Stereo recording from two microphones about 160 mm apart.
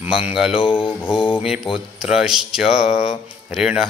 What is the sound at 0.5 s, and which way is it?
Mantra, 35° left (ahead or behind).